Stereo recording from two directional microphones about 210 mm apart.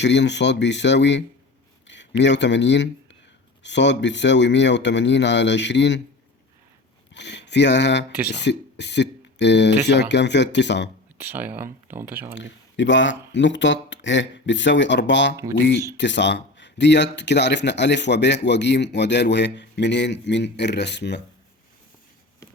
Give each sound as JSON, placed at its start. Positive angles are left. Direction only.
{"t": 0.0, "sound": "speech", "side_deg": 55}
{"t": 7.1, "sound": "speech", "side_deg": 55}
{"t": 11.2, "sound": "speech", "side_deg": -10}
{"t": 12.4, "sound": "speech", "side_deg": 60}